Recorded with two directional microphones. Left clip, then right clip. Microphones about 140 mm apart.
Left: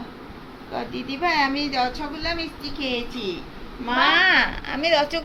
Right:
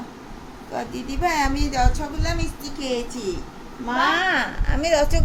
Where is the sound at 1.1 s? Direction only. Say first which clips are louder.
Left 1 dB; 25° right (ahead or behind).